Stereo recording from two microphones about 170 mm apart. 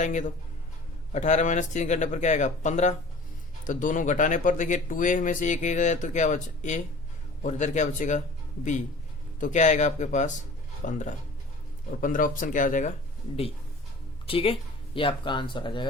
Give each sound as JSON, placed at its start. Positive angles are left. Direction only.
{"t": 0.0, "sound": "speech", "side_deg": 45}
{"t": 9.4, "sound": "speech", "side_deg": 45}
{"t": 14.3, "sound": "speech", "side_deg": 35}